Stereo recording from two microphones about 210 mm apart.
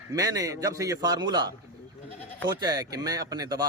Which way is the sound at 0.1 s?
15° right (ahead or behind).